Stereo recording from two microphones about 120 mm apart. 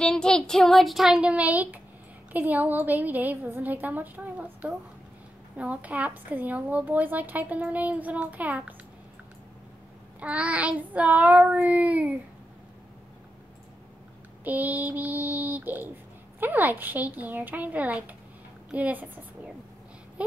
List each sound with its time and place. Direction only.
0.0 s child singing: 5° left (ahead or behind); by 1.8 s 10° right (ahead or behind)
2.3 s a woman's voice: 15° right (ahead or behind)
10.2 s a woman's voice: 10° right (ahead or behind)
14.4 s a woman's voice: 15° right (ahead or behind)
20.2 s a sound: 10° right (ahead or behind)